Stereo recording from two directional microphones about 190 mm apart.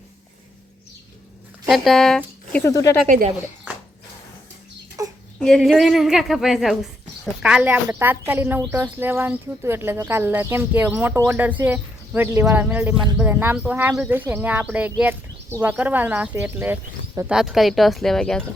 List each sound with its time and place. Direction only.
1.6 s speech: centre (ahead or behind)
2.7 s speech: 15° left (ahead or behind)
5.0 s a sound: 15° right (ahead or behind)
5.4 s a woman's voice: centre (ahead or behind)